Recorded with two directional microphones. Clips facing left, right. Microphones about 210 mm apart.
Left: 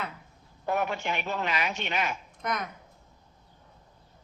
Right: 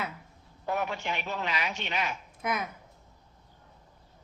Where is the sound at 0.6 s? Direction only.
50° left (ahead or behind).